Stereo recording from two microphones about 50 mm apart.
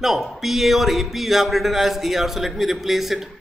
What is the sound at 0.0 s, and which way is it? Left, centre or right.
A man's voice, centre.